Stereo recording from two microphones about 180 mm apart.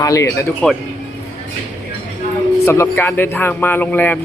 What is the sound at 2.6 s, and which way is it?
A man's voice, 15° left (ahead or behind).